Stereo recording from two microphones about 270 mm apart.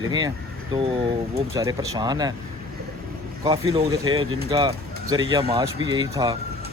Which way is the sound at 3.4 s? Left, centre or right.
Centre.